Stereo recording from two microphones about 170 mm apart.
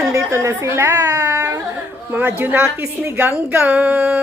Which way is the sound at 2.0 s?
10° right (ahead or behind).